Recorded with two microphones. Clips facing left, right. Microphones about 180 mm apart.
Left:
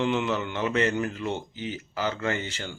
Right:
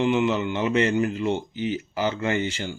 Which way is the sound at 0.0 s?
10° right (ahead or behind).